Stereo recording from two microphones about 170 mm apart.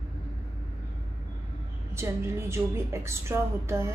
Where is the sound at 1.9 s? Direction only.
15° right (ahead or behind).